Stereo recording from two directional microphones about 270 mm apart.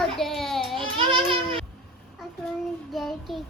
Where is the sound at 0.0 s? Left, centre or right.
Centre.